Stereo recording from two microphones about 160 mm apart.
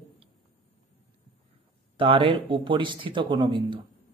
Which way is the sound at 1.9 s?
35° right (ahead or behind).